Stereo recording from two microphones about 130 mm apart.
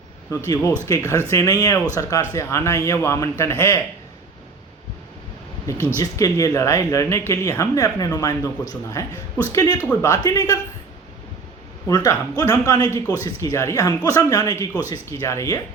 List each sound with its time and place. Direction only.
0.3 s speech: 25° left (ahead or behind)
6.0 s speech: 25° left (ahead or behind)
11.9 s speech: 30° left (ahead or behind)